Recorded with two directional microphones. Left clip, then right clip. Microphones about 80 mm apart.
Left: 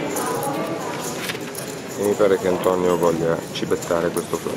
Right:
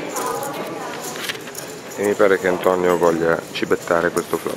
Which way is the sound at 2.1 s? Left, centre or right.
Right.